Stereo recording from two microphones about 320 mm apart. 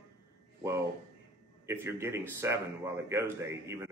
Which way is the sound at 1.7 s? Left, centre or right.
Centre.